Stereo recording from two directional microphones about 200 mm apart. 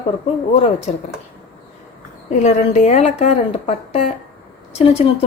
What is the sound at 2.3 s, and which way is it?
A woman's voice, 35° left (ahead or behind).